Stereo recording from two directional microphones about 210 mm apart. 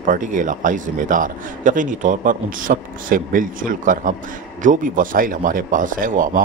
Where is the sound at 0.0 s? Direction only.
40° right (ahead or behind).